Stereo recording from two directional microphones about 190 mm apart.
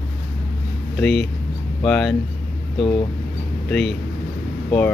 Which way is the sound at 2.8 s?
25° left (ahead or behind).